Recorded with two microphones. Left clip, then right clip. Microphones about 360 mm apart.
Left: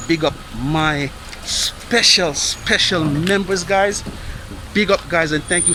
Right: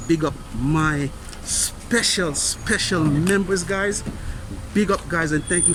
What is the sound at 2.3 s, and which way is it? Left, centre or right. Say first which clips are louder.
Speech: left 5 dB; left.